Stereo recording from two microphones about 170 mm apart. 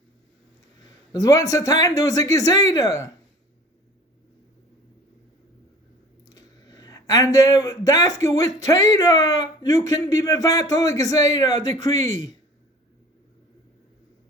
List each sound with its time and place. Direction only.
1.1 s speech: 20° left (ahead or behind)
6.2 s speech: 20° left (ahead or behind)